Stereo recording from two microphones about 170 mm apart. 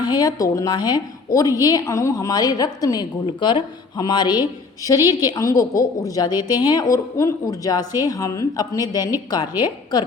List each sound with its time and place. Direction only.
0.0 s a woman's voice: 25° left (ahead or behind)